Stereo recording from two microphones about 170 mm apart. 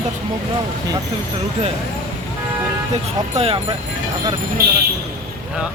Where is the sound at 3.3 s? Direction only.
35° right (ahead or behind).